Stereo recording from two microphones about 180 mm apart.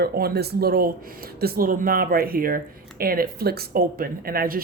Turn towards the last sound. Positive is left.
turn(degrees=-55)  # may be behind; listen again after turning